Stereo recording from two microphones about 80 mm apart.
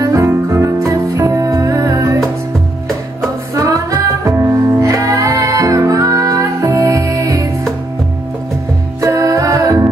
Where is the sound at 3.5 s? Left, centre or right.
Right.